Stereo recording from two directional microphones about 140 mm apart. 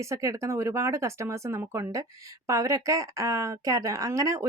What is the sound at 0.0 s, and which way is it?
Speech, 20° right (ahead or behind).